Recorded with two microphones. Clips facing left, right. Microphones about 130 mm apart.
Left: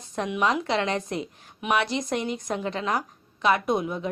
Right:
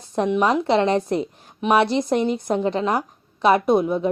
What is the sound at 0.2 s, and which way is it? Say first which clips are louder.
Speech: right 6 dB; 30° right (ahead or behind).